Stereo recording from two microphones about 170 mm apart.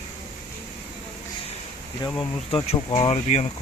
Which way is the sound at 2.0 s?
25° left (ahead or behind).